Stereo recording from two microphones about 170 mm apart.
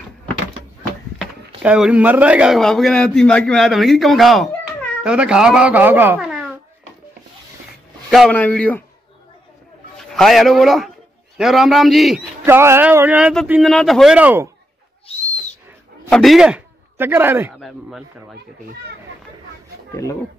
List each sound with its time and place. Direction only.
1.1 s speech: 5° right (ahead or behind)
8.1 s a man's voice: 5° left (ahead or behind)
9.9 s a man's voice: centre (ahead or behind)
12.4 s speech: 15° right (ahead or behind)
13.5 s speech: centre (ahead or behind)
15.1 s owl: 35° left (ahead or behind)
16.1 s a man's voice: centre (ahead or behind)
17.6 s speech: centre (ahead or behind)
19.9 s speech: 20° left (ahead or behind)